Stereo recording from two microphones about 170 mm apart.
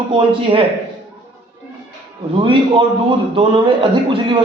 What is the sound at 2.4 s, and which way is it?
Speech, 30° right (ahead or behind).